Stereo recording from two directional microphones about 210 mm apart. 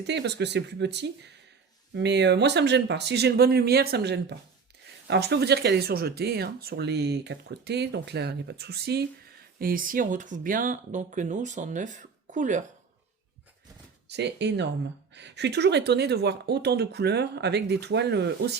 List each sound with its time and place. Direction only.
0.1 s speech: 55° right (ahead or behind); by 12.6 s 35° right (ahead or behind)
14.1 s speech: 55° right (ahead or behind)